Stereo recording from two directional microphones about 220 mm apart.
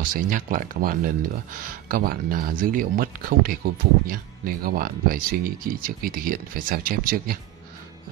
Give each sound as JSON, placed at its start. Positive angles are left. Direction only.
{"t": 0.1, "sound": "speech", "side_deg": -40}